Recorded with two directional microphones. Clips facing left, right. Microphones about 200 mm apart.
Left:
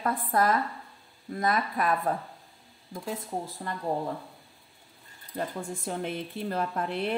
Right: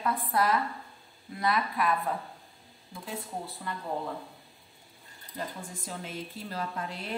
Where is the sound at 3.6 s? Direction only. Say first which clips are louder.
Left 2 dB; 40° left (ahead or behind).